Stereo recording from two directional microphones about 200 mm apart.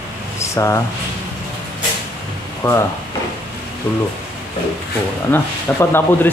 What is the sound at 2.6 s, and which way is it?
Speech, 15° left (ahead or behind).